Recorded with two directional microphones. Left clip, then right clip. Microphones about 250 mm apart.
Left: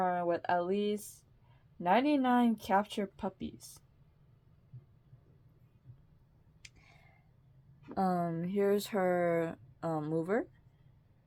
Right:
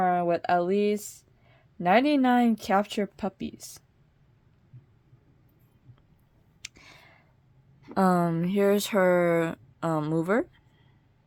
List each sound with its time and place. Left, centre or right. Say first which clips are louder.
0.0 s speech: right 7 dB; right
6.6 s a sound: right 12 dB; right
7.9 s speech: right 9 dB; right